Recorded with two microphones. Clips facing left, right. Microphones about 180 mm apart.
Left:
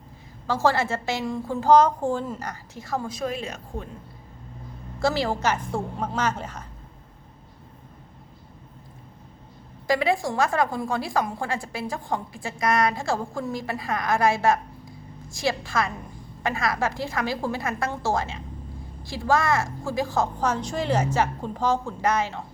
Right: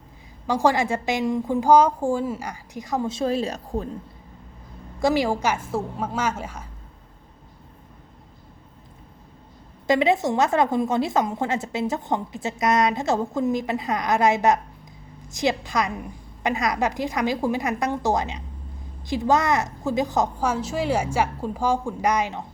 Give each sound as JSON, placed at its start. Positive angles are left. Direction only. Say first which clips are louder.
{"t": 0.4, "sound": "a woman's voice", "louder": "right 2 dB", "side_deg": -15}
{"t": 4.9, "sound": "a woman's voice", "louder": "right 3 dB", "side_deg": -15}
{"t": 9.8, "sound": "a woman's voice", "louder": "right 3 dB", "side_deg": -20}